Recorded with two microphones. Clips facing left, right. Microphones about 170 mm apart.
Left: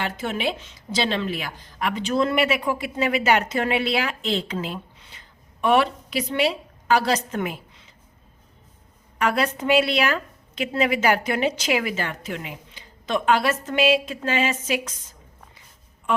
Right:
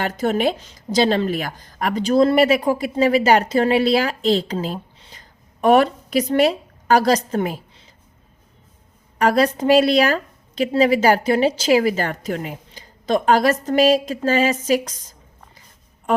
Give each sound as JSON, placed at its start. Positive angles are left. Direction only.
{"t": 0.0, "sound": "a woman's voice", "side_deg": -40}
{"t": 9.1, "sound": "a woman's voice", "side_deg": -35}
{"t": 16.1, "sound": "a sound", "side_deg": -40}